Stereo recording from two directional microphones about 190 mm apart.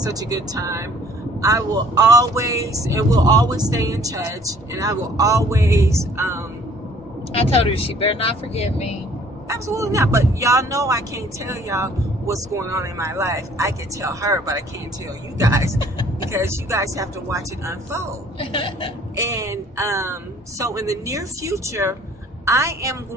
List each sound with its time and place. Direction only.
0.0 s speech: 20° right (ahead or behind)
7.3 s speech: 30° left (ahead or behind)
9.5 s speech: 15° right (ahead or behind)
18.4 s speech: 30° left (ahead or behind)
19.1 s speech: 20° right (ahead or behind)